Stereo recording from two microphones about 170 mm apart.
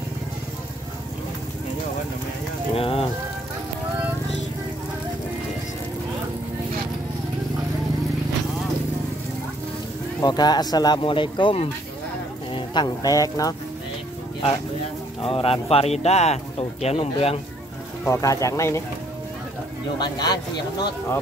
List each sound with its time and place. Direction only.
2.7 s rain on surface: 35° left (ahead or behind)
10.2 s speech: 25° left (ahead or behind)
15.2 s speech: 35° left (ahead or behind)
18.0 s speech: 15° left (ahead or behind)
20.0 s speech: 25° left (ahead or behind)